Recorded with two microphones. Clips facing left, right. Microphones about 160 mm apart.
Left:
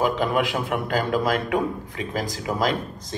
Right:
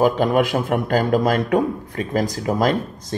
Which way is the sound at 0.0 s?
45° right (ahead or behind).